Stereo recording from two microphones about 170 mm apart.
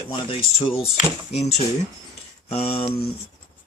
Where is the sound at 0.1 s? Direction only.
30° left (ahead or behind).